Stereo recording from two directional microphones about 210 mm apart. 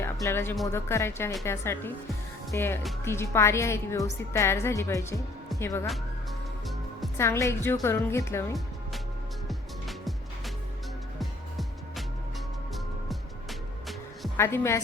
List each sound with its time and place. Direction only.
0.0 s a woman's voice: 10° left (ahead or behind)
7.2 s a woman's voice: 15° left (ahead or behind)
9.5 s music: centre (ahead or behind)
14.3 s a woman's voice: 10° left (ahead or behind)